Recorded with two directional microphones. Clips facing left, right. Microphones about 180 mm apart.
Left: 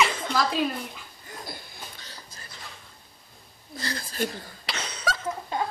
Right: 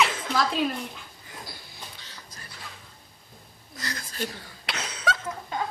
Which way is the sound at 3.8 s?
30° left (ahead or behind).